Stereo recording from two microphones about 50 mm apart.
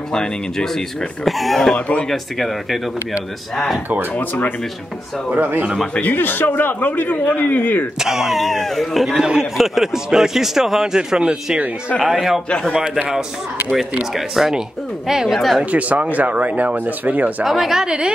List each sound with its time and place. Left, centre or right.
0.1 s speech: centre
1.2 s speech: centre
4.2 s a man's voice: left
5.3 s speech: right
5.9 s a man's voice: left
8.0 s speech: centre
8.5 s speech: centre
9.2 s speech: centre
12.4 s speech: centre
12.7 s speech: centre
14.1 s speech: centre
15.6 s speech: right
17.5 s speech: centre